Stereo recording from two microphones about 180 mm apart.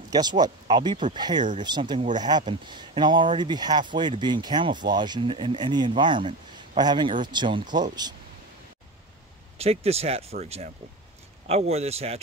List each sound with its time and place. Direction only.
0.1 s speech: 20° right (ahead or behind)
9.6 s a man's voice: 35° right (ahead or behind)
11.4 s a man's voice: 35° right (ahead or behind)